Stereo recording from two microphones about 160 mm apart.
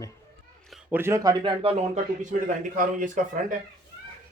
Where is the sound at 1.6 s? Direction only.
40° right (ahead or behind); by 3.5 s 55° right (ahead or behind).